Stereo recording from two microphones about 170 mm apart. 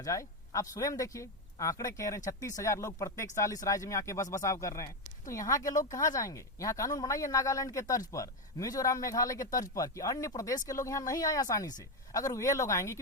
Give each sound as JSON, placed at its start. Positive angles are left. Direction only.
{"t": 0.0, "sound": "speech", "side_deg": 20}